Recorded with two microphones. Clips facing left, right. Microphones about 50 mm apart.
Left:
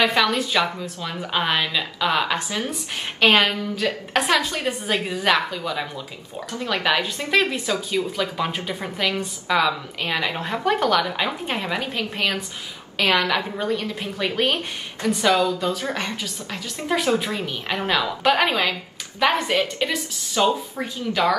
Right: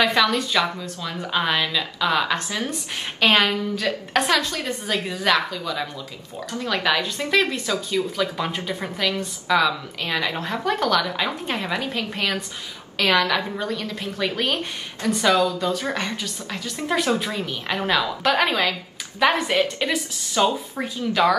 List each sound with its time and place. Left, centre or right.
0.0 s a woman's voice: centre